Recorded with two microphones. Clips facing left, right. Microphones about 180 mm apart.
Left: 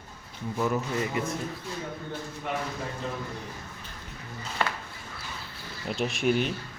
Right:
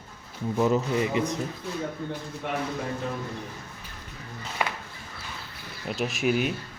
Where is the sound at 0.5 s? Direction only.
20° right (ahead or behind).